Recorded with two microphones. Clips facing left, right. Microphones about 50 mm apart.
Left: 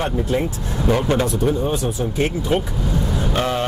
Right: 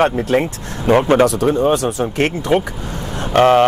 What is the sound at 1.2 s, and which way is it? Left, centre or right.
Speech, right.